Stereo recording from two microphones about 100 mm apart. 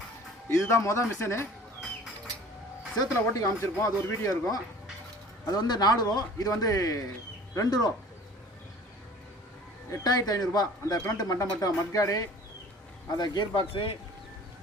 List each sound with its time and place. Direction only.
0.5 s speech: 30° left (ahead or behind)
3.0 s speech: 35° left (ahead or behind)
9.9 s speech: 40° left (ahead or behind)
13.1 s a man's voice: 45° left (ahead or behind); by 13.9 s 60° left (ahead or behind)